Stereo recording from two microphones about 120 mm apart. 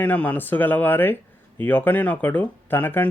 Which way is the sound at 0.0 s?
15° left (ahead or behind).